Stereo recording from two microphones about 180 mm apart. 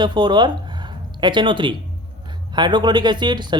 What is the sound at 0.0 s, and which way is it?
Speech, 25° right (ahead or behind).